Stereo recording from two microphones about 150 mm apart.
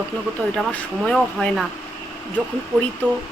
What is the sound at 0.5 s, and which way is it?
Speech, 5° left (ahead or behind).